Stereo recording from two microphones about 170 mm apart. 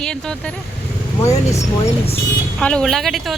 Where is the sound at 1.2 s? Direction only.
20° left (ahead or behind).